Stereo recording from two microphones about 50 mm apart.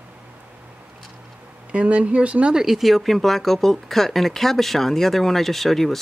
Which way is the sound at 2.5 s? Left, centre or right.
Centre.